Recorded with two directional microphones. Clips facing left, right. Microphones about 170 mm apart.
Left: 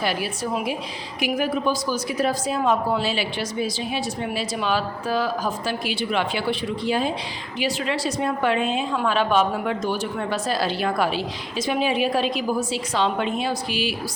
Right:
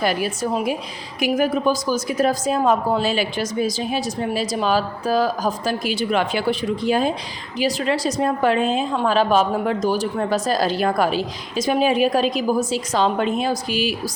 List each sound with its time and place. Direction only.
0.0 s a woman's voice: 45° right (ahead or behind)